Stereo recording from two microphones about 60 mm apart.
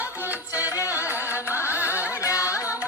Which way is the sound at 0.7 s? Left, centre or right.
Left.